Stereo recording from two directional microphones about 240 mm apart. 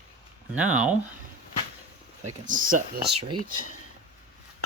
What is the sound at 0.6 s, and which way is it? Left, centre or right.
Speech, centre.